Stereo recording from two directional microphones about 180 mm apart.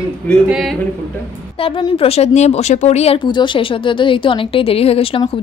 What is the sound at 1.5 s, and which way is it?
Speech, 30° left (ahead or behind).